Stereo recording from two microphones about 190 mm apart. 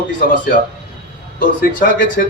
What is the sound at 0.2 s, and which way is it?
Speech, 50° left (ahead or behind).